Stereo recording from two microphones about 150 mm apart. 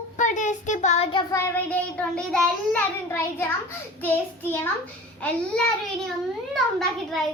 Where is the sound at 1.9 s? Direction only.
5° left (ahead or behind).